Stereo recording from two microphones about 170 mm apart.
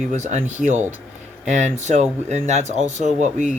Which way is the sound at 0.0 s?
45° right (ahead or behind).